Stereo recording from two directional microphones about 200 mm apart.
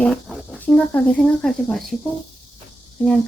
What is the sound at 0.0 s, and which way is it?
Speech, 5° left (ahead or behind).